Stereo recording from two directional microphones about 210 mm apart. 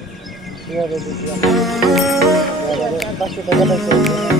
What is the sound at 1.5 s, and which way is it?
Speech, centre (ahead or behind).